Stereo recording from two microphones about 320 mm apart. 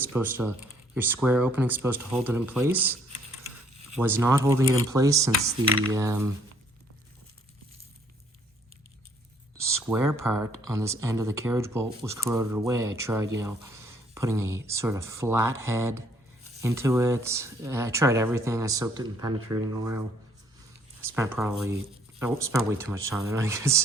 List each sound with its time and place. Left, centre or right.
0.1 s speech: centre
4.0 s speech: centre
9.6 s a sound: right
9.8 s speech: centre
10.2 s speech: right
10.7 s speech: centre
21.3 s speech: centre